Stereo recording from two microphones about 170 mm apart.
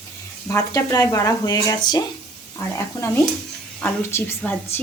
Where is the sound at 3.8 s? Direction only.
10° left (ahead or behind).